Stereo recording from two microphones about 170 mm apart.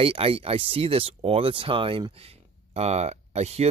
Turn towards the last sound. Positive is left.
turn(degrees=-40)  # may be behind; listen again after turning